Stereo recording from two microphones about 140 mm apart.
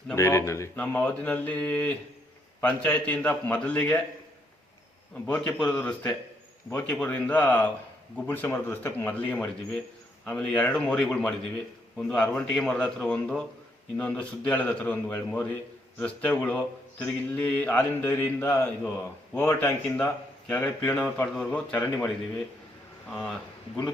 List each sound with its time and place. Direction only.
0.2 s speech: 20° left (ahead or behind)
0.8 s speech: 10° left (ahead or behind)
5.2 s speech: 15° left (ahead or behind)
23.0 s speech: centre (ahead or behind)